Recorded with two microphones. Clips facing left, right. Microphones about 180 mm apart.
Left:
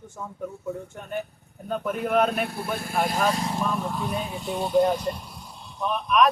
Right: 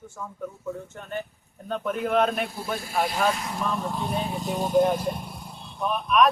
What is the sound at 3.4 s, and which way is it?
Speech, 30° left (ahead or behind).